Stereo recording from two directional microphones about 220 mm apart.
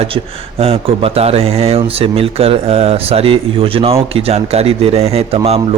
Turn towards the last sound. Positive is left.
turn(degrees=-25)  # may be behind; listen again after turning